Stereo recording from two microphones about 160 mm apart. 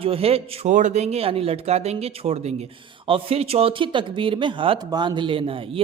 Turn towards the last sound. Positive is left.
turn(degrees=-35)  # may be behind; listen again after turning